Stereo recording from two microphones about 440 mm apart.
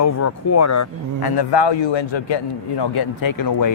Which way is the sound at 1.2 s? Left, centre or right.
Left.